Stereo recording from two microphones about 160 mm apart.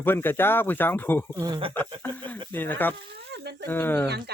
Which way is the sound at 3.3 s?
90° right.